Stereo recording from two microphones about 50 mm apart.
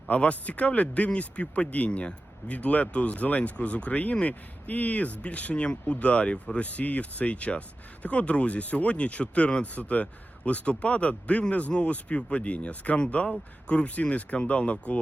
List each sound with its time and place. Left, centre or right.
0.1 s speech: left